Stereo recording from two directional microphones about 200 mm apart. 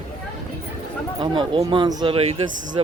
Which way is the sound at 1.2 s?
25° right (ahead or behind).